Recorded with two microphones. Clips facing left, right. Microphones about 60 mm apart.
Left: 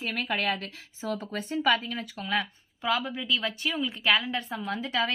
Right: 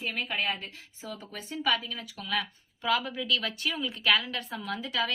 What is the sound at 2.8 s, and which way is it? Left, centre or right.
A woman's voice, centre.